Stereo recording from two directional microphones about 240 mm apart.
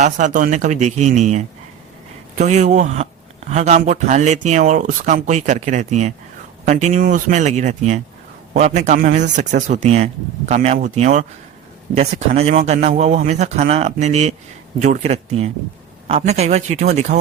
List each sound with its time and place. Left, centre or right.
0.0 s speech: right
2.4 s speech: right